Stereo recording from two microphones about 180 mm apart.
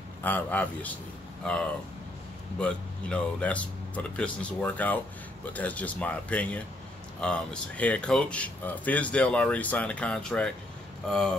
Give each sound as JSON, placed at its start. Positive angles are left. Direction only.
{"t": 0.2, "sound": "speech", "side_deg": 10}